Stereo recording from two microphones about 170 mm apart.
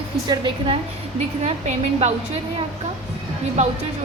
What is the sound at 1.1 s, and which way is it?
Speech, 40° right (ahead or behind).